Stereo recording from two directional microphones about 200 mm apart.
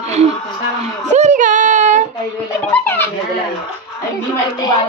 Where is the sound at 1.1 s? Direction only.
35° right (ahead or behind).